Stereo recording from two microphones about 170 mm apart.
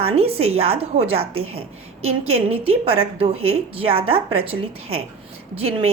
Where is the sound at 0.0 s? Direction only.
35° right (ahead or behind).